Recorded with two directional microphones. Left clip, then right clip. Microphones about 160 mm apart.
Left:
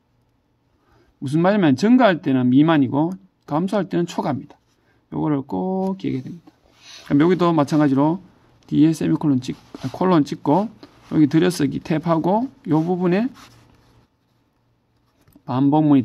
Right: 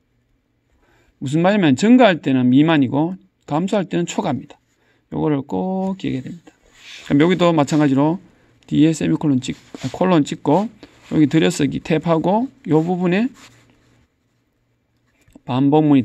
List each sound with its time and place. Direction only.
1.2 s speech: 25° right (ahead or behind)
6.8 s speech: 25° right (ahead or behind)
15.4 s speech: 30° right (ahead or behind)